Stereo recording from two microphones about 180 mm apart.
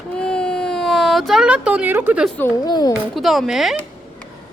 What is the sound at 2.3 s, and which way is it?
Speech, 20° left (ahead or behind).